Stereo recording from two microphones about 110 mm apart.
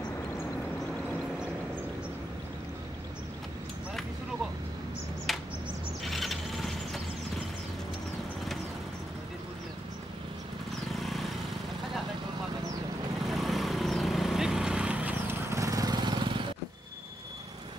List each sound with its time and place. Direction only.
5.3 s a sound: centre (ahead or behind)
6.0 s vehicle: centre (ahead or behind)
11.0 s vehicle: centre (ahead or behind)
13.3 s vehicle: centre (ahead or behind)
15.5 s lawn mower: 30° right (ahead or behind)